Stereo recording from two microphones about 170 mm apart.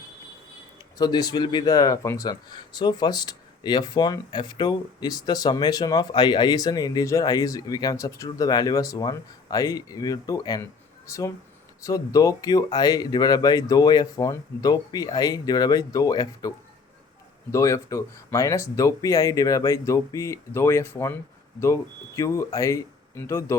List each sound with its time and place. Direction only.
0.9 s speech: 25° left (ahead or behind)